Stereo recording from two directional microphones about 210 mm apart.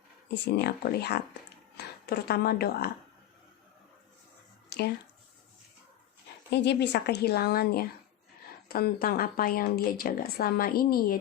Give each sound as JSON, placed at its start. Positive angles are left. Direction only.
{"t": 0.3, "sound": "speech", "side_deg": 50}
{"t": 4.7, "sound": "speech", "side_deg": 50}
{"t": 6.5, "sound": "speech", "side_deg": 55}